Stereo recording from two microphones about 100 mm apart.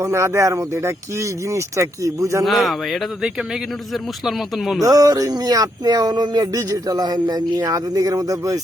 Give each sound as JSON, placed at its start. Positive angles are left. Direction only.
{"t": 0.0, "sound": "speech", "side_deg": -30}
{"t": 2.4, "sound": "speech", "side_deg": 0}
{"t": 4.3, "sound": "speech", "side_deg": 0}
{"t": 4.8, "sound": "speech", "side_deg": -35}